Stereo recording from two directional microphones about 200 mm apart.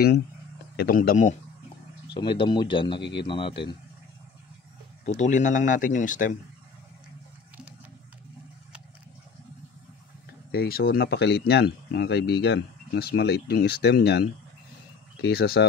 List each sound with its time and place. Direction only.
0.7 s speech: 45° left (ahead or behind)
2.1 s speech: 25° left (ahead or behind)
5.0 s speech: 35° left (ahead or behind)
10.5 s speech: 50° left (ahead or behind)